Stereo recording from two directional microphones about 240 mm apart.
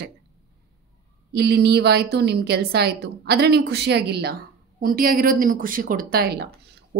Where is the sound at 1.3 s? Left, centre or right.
Right.